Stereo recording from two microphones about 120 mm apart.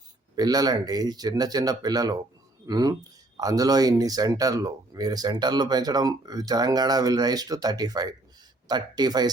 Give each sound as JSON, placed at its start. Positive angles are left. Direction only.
{"t": 0.3, "sound": "speech", "side_deg": -35}